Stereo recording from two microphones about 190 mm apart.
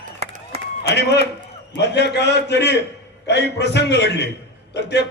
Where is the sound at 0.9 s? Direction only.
60° left (ahead or behind).